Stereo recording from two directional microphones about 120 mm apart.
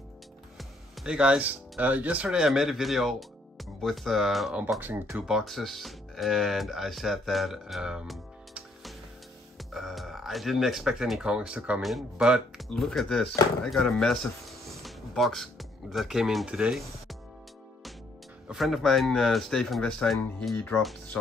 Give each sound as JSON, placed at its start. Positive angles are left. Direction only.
{"t": 0.6, "sound": "speech", "side_deg": -5}
{"t": 4.7, "sound": "speech", "side_deg": -15}
{"t": 5.2, "sound": "speech", "side_deg": 0}
{"t": 18.5, "sound": "speech", "side_deg": 0}